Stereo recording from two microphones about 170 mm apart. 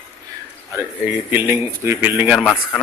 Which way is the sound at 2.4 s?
5° left (ahead or behind).